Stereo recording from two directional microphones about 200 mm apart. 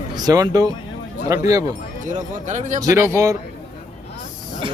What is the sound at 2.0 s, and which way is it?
Speech, 40° right (ahead or behind).